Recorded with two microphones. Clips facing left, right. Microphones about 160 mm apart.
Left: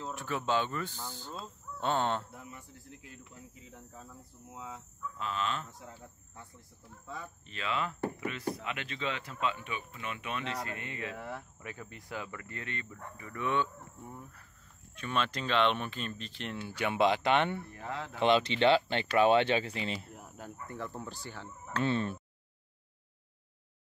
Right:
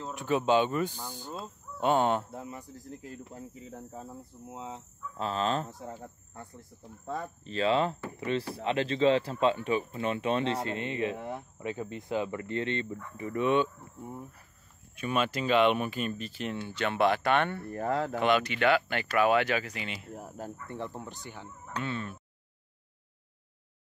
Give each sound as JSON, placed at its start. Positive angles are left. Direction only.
{"t": 0.1, "sound": "speech", "side_deg": -20}
{"t": 1.3, "sound": "fowl", "side_deg": -10}
{"t": 2.3, "sound": "speech", "side_deg": -30}
{"t": 4.5, "sound": "speech", "side_deg": -25}
{"t": 7.4, "sound": "speech", "side_deg": -35}
{"t": 15.0, "sound": "speech", "side_deg": -10}
{"t": 16.6, "sound": "speech", "side_deg": 10}
{"t": 17.6, "sound": "speech", "side_deg": -50}
{"t": 18.2, "sound": "speech", "side_deg": 25}
{"t": 20.1, "sound": "speech", "side_deg": -40}
{"t": 20.7, "sound": "speech", "side_deg": -20}
{"t": 21.8, "sound": "speech", "side_deg": 30}